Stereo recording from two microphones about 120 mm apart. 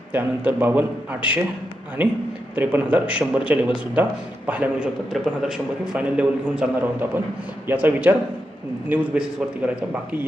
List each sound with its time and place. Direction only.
0.1 s a man's voice: 15° right (ahead or behind)
5.1 s a man's voice: centre (ahead or behind)